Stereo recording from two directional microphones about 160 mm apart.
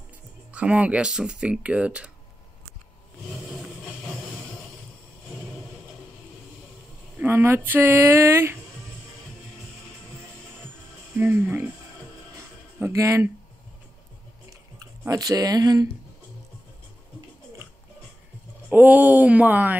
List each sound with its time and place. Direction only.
0.5 s speech: 10° right (ahead or behind)
7.2 s speech: 15° right (ahead or behind)
11.1 s speech: 15° right (ahead or behind)
12.7 s speech: 15° right (ahead or behind)
15.0 s speech: 25° right (ahead or behind)
18.7 s speech: 10° right (ahead or behind)